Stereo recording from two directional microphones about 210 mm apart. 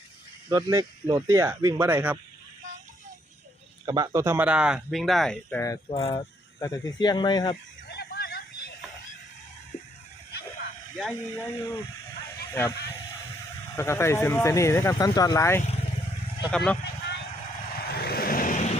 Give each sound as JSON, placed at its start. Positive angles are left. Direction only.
{"t": 0.5, "sound": "speech", "side_deg": -15}
{"t": 3.8, "sound": "speech", "side_deg": -20}
{"t": 5.9, "sound": "speech", "side_deg": 25}
{"t": 7.5, "sound": "a sound", "side_deg": 50}
{"t": 10.9, "sound": "speech", "side_deg": 0}
{"t": 11.4, "sound": "speech", "side_deg": 15}
{"t": 12.5, "sound": "vehicle", "side_deg": 10}
{"t": 13.7, "sound": "speech", "side_deg": 15}
{"t": 16.5, "sound": "speech", "side_deg": 5}
{"t": 18.0, "sound": "vehicle", "side_deg": 45}